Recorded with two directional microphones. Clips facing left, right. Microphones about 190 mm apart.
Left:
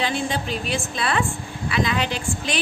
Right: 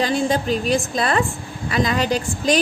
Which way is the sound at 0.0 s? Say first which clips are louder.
Right 5 dB; 40° right (ahead or behind).